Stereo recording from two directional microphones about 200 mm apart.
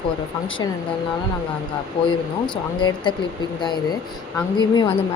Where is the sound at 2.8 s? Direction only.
25° left (ahead or behind).